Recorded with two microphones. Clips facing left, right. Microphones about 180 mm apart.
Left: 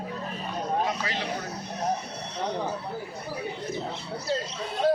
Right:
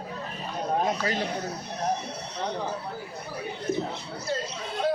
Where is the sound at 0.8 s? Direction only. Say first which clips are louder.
Right 3 dB; 45° right (ahead or behind).